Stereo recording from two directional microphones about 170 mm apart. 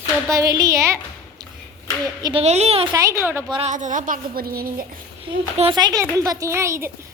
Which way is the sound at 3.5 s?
40° right (ahead or behind).